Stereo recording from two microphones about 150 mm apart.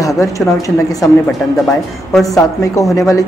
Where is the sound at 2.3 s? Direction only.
20° left (ahead or behind).